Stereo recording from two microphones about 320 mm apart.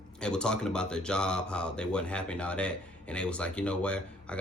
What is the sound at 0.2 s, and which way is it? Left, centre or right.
Speech, centre.